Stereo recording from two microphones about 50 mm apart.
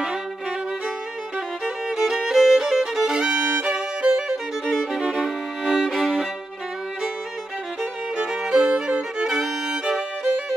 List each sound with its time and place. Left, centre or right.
1.9 s music: centre
3.2 s violin: centre
5.7 s violin: centre
8.2 s music: centre
9.4 s violin: centre